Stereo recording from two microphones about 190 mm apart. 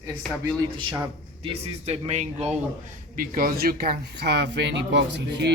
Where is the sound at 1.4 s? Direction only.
30° right (ahead or behind).